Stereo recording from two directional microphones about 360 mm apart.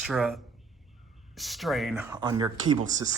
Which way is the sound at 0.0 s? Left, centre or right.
Centre.